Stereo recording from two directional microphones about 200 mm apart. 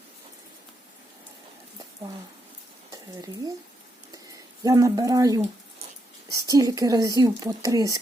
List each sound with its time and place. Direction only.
2.9 s speech: 20° right (ahead or behind)
4.1 s a sound: 15° right (ahead or behind)
6.3 s speech: 15° right (ahead or behind)